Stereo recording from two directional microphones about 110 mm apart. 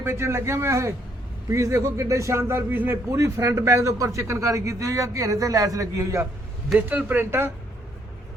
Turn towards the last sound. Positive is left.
turn(degrees=-20)  # may be behind; listen again after turning